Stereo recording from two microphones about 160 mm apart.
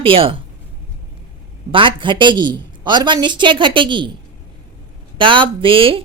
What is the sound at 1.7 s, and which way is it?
A woman's voice, 30° right (ahead or behind).